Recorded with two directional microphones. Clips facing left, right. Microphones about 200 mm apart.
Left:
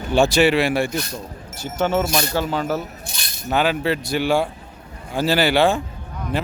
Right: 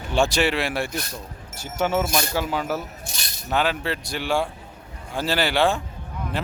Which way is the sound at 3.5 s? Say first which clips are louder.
Left 4 dB; 5° left (ahead or behind).